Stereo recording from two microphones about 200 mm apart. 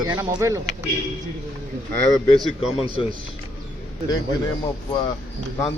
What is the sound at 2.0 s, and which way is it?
Speech, centre (ahead or behind).